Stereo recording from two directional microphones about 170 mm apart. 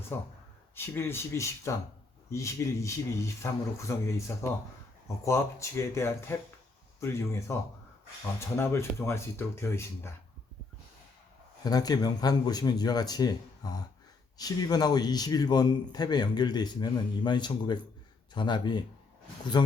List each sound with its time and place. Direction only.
0.1 s speech: 15° left (ahead or behind)
5.0 s speech: 15° left (ahead or behind)
11.6 s a man's voice: 20° left (ahead or behind)